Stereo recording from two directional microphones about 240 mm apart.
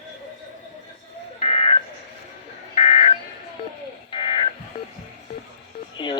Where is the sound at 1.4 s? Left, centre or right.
Left.